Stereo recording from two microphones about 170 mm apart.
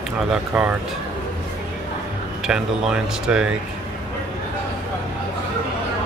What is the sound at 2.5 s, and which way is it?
Speech, 5° right (ahead or behind).